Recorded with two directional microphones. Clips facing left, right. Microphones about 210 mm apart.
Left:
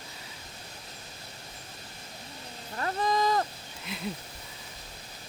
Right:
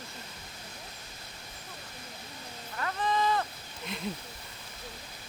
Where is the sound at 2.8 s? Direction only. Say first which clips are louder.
Left 2 dB; 35° left (ahead or behind).